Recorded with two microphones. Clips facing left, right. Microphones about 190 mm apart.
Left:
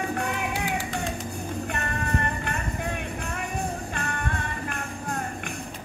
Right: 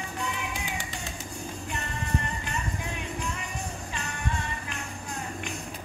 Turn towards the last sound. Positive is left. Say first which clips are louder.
# left 4 dB
turn(degrees=55)  # may be behind; listen again after turning